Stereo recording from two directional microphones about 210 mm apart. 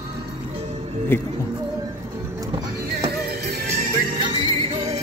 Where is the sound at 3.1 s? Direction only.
50° right (ahead or behind).